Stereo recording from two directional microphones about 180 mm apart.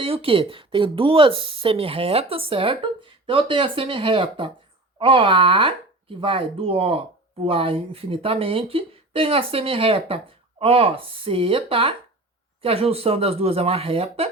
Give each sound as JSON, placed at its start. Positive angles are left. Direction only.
{"t": 0.0, "sound": "speech", "side_deg": -30}